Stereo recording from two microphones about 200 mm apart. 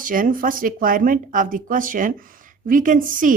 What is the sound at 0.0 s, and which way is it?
A woman's voice, 45° right (ahead or behind).